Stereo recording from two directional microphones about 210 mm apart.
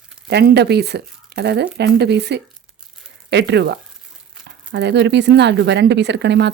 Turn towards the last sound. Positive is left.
turn(degrees=-55)  # may be behind; listen again after turning